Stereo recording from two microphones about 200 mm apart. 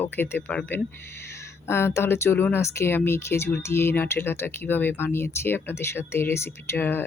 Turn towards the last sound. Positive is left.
turn(degrees=10)  # may be behind; listen again after turning